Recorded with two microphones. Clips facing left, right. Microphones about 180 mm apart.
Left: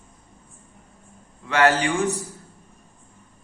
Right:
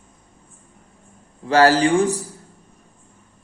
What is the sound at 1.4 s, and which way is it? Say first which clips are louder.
Speech: right 5 dB; 35° right (ahead or behind).